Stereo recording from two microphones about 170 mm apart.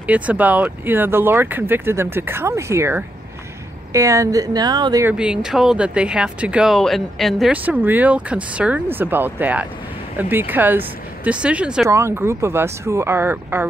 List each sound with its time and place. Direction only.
0.0 s speech: 10° right (ahead or behind); by 5.0 s 25° right (ahead or behind)
5.0 s speech: 5° right (ahead or behind)